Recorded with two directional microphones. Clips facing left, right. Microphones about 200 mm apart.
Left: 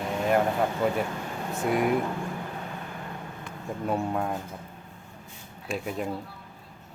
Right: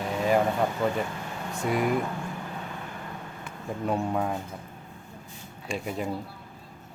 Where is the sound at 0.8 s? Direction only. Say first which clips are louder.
Left 1 dB; 10° left (ahead or behind).